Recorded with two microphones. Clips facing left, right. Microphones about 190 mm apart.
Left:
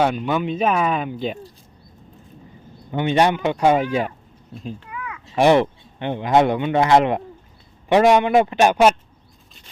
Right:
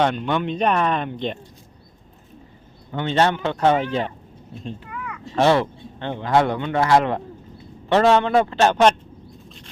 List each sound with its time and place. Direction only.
0.0 s speech: 5° left (ahead or behind)
2.9 s speech: 15° left (ahead or behind)
4.5 s a sound: centre (ahead or behind)
5.4 s speech: 15° left (ahead or behind)